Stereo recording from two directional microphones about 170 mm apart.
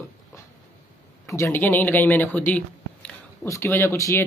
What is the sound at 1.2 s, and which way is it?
A man's voice, 15° left (ahead or behind).